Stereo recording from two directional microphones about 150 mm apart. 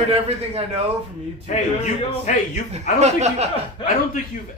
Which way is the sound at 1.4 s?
50° left (ahead or behind).